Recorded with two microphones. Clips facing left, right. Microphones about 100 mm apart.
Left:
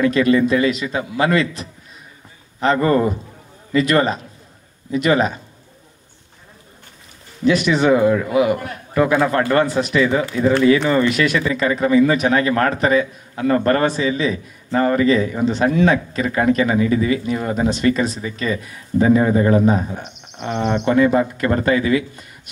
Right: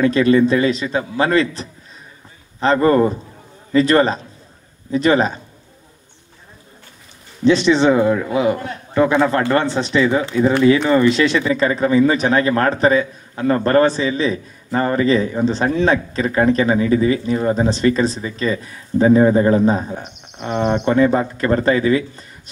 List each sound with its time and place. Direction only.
0.0 s speech: 35° right (ahead or behind)
7.4 s a man's voice: 30° right (ahead or behind)